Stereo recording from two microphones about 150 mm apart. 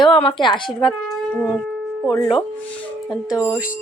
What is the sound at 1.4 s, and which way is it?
Speech, 5° left (ahead or behind).